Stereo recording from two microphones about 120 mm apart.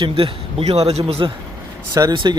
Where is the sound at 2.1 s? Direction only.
40° right (ahead or behind).